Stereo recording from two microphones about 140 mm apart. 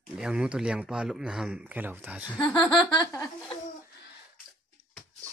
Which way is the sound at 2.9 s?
30° left (ahead or behind).